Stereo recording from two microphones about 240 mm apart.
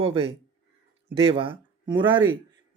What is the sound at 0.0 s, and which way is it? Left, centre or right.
Speech, right.